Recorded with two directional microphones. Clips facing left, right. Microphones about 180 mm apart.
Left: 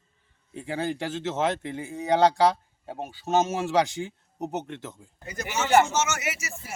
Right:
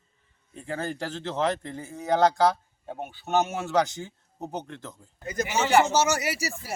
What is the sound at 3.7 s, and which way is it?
Speech, 10° left (ahead or behind).